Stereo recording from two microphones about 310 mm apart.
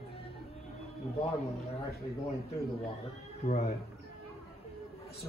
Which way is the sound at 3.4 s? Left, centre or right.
Left.